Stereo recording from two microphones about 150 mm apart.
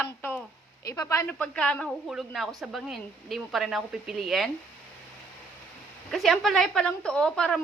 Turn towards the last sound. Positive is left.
turn(degrees=5)  # may be behind; listen again after turning